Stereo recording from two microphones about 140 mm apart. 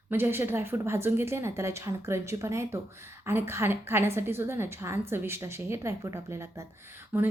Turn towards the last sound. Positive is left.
turn(degrees=-15)  # may be behind; listen again after turning